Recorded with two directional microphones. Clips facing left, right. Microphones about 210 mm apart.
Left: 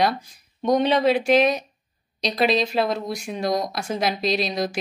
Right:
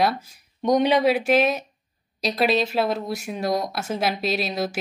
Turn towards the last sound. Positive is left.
turn(degrees=-5)  # may be behind; listen again after turning